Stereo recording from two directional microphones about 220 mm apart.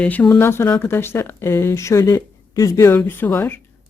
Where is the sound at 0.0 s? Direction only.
5° left (ahead or behind).